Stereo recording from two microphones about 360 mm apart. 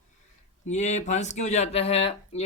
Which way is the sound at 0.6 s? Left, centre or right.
Centre.